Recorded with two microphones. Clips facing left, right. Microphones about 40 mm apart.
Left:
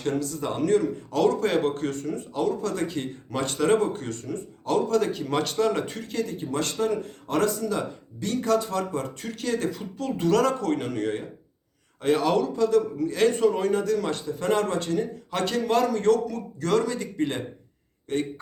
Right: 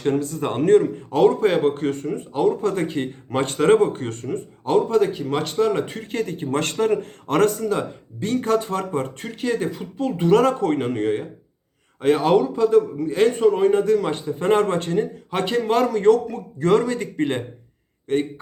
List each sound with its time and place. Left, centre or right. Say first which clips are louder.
0.0 s speech: right 5 dB; right
4.9 s a man's voice: right 4 dB; centre; by 18.2 s right